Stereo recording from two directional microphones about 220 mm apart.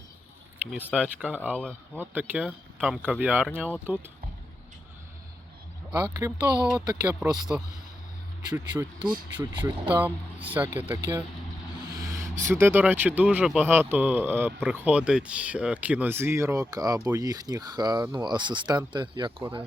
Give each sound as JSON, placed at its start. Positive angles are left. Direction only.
{"t": 0.6, "sound": "speech", "side_deg": -10}
{"t": 5.9, "sound": "speech", "side_deg": -15}
{"t": 9.8, "sound": "speech", "side_deg": -5}